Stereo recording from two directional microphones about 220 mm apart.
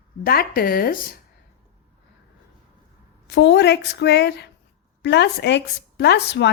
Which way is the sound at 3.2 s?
50° left (ahead or behind).